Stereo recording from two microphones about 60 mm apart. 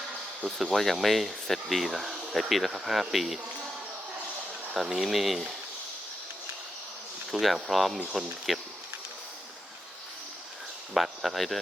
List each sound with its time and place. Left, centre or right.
0.4 s speech: centre
4.7 s speech: centre
7.3 s speech: centre
10.9 s speech: centre